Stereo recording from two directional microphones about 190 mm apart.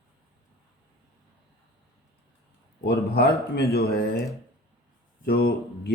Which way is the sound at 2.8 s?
60° left (ahead or behind).